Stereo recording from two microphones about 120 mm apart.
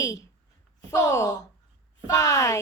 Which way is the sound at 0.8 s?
25° left (ahead or behind).